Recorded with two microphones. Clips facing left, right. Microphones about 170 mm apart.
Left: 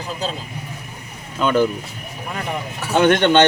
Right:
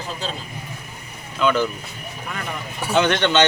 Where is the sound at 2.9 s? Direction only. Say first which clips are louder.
Left 4 dB; 50° left (ahead or behind).